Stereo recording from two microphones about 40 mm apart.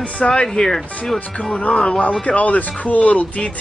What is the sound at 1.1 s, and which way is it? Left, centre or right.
A man's voice, left.